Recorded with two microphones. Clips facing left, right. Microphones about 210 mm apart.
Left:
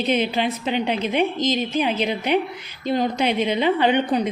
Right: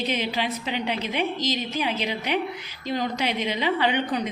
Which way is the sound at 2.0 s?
55° left (ahead or behind).